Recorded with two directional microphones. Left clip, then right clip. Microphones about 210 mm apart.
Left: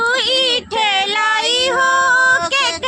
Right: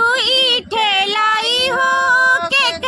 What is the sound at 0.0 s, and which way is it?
Female singing, 5° right (ahead or behind).